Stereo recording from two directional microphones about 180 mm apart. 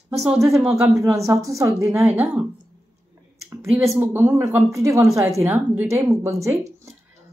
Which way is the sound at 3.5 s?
15° right (ahead or behind).